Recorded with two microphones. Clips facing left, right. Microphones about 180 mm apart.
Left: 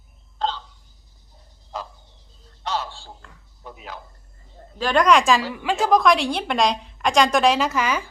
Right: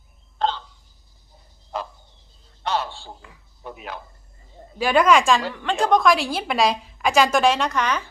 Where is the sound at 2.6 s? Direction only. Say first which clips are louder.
Right 2 dB; 60° right (ahead or behind).